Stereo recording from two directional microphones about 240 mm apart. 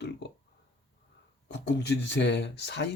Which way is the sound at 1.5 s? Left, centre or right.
Left.